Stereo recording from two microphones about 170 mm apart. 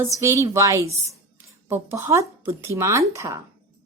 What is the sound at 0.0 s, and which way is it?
Speech, 15° right (ahead or behind).